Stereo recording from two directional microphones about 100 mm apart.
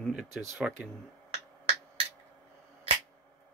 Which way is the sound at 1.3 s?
70° right (ahead or behind).